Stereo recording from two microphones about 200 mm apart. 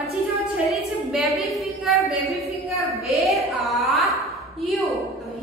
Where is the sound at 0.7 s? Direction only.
Centre (ahead or behind).